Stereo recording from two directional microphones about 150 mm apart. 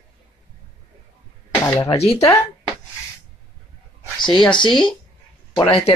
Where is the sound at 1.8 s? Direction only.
40° left (ahead or behind).